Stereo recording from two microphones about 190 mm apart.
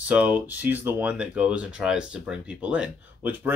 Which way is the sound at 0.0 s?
5° right (ahead or behind).